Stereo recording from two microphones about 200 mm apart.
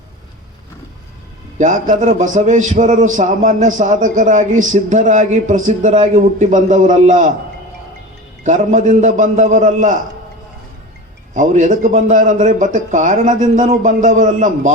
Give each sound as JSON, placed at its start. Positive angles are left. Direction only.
{"t": 1.5, "sound": "a man's voice", "side_deg": -40}
{"t": 8.4, "sound": "a man's voice", "side_deg": -40}
{"t": 11.3, "sound": "a man's voice", "side_deg": -40}